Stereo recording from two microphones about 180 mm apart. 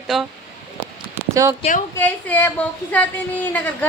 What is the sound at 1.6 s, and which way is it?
Speech, 35° left (ahead or behind).